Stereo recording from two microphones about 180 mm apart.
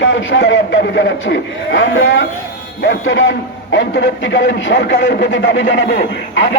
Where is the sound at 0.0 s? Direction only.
90° left.